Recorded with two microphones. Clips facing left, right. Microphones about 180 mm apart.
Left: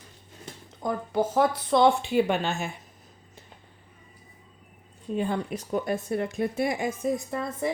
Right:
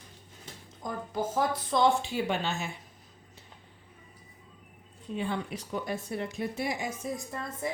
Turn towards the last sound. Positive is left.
turn(degrees=75)  # may be behind; listen again after turning